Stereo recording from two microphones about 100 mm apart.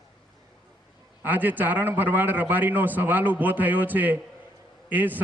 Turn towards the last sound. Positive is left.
turn(degrees=-20)  # may be behind; listen again after turning